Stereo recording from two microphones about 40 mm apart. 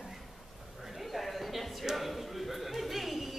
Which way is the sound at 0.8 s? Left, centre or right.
Centre.